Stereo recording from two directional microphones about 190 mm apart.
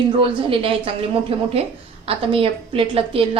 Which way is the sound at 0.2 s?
30° right (ahead or behind).